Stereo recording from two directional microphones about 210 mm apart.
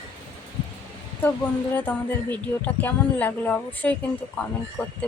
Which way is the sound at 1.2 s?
10° left (ahead or behind).